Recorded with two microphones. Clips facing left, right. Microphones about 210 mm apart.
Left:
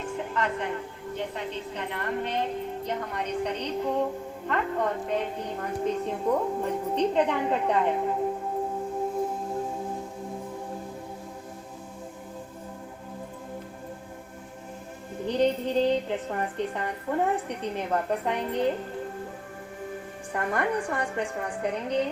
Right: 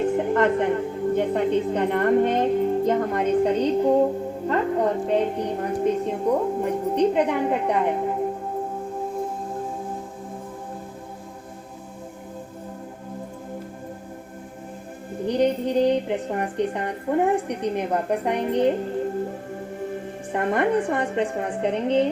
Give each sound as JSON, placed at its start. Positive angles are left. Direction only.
{"t": 0.0, "sound": "music", "side_deg": -55}
{"t": 1.1, "sound": "a woman's voice", "side_deg": -50}
{"t": 5.8, "sound": "a woman's voice", "side_deg": -15}
{"t": 15.3, "sound": "a woman's voice", "side_deg": -15}
{"t": 20.3, "sound": "a woman's voice", "side_deg": -25}